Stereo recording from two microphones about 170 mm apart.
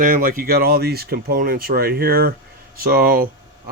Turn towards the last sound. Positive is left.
turn(degrees=-55)  # may be behind; listen again after turning